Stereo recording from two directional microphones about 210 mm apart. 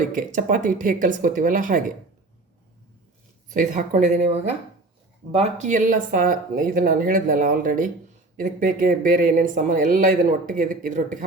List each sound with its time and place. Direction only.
0.1 s speech: 40° right (ahead or behind)
3.5 s speech: 40° right (ahead or behind)